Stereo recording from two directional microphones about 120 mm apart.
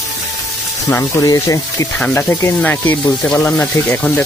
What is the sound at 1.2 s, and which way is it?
Speech, 25° left (ahead or behind).